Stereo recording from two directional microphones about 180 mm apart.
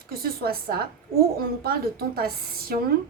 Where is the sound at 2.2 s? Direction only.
55° right (ahead or behind).